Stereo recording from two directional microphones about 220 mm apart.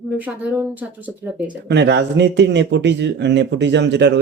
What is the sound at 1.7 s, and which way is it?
A man's voice, 50° right (ahead or behind).